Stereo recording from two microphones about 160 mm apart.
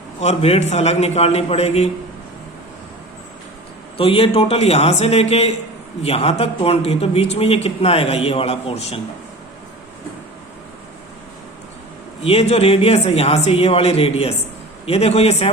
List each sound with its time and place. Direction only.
0.2 s a man's voice: 40° left (ahead or behind)
3.9 s a man's voice: 35° left (ahead or behind)
12.2 s a man's voice: 35° left (ahead or behind)